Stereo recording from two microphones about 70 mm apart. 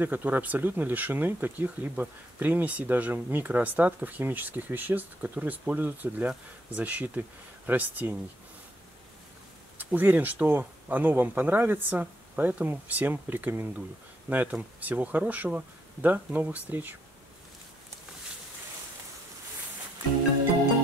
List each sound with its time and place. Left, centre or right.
0.0 s speech: right
9.8 s speech: right